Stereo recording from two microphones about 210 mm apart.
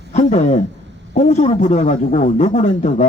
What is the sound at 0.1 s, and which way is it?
A man's voice, 35° left (ahead or behind).